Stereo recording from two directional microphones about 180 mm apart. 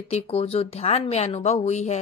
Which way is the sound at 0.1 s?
35° left (ahead or behind).